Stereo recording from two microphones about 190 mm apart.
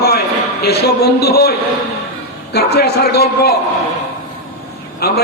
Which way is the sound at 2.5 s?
55° left (ahead or behind).